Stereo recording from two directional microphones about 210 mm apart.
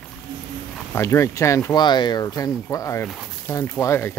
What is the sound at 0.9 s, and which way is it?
Speech, 15° left (ahead or behind).